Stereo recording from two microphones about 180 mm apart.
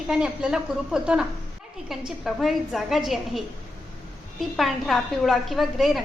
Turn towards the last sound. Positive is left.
turn(degrees=0)  # may be behind; listen again after turning